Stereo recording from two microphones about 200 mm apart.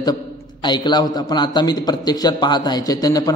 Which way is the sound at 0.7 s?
20° left (ahead or behind).